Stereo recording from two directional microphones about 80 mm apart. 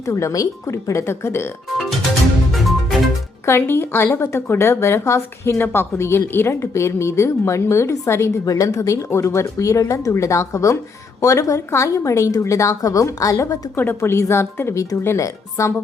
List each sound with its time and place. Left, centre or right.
0.0 s a woman's voice: left
1.8 s music: centre
3.4 s a woman's voice: left
5.5 s a woman's voice: left
13.7 s a woman's voice: left